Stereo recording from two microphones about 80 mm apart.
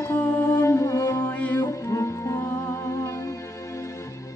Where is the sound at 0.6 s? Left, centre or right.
Left.